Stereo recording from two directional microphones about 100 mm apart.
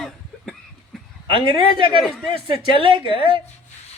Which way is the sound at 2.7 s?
60° right (ahead or behind).